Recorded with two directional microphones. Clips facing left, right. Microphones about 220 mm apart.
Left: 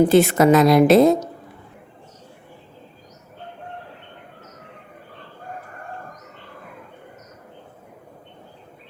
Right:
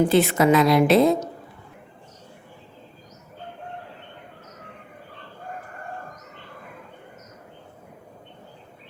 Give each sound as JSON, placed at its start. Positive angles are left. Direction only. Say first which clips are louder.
{"t": 0.1, "sound": "a woman's voice", "louder": "left 4 dB", "side_deg": 45}